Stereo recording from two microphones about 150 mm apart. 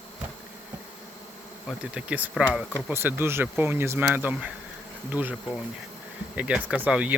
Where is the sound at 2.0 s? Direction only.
10° right (ahead or behind).